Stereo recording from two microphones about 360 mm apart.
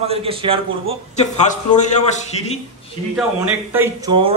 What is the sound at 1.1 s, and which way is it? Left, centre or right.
Speech, centre.